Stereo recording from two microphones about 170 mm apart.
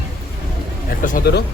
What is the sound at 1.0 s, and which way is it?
Speech, 50° left (ahead or behind).